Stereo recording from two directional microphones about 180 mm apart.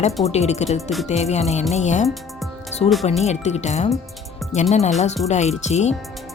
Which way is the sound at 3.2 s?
40° left (ahead or behind).